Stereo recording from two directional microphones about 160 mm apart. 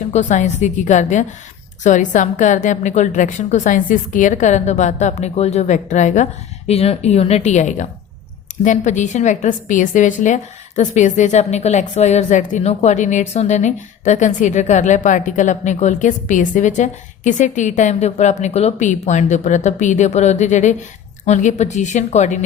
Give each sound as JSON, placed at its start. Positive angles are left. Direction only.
{"t": 0.1, "sound": "a woman's voice", "side_deg": 50}